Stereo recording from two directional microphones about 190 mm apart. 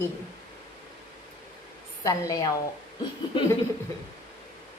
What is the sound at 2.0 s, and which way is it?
Speech, 20° left (ahead or behind).